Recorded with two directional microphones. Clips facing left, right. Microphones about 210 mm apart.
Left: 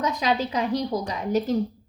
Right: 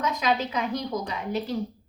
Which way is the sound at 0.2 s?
35° left (ahead or behind).